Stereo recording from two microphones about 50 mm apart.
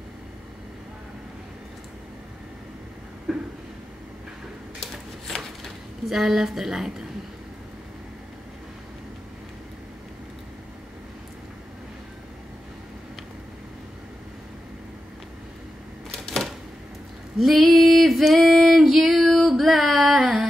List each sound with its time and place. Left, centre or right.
3.3 s a sound: centre
6.0 s a woman's voice: centre
16.1 s typewriter: centre
17.4 s female singing: centre